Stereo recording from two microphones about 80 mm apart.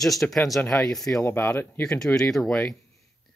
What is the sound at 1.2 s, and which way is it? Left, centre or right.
Speech, left.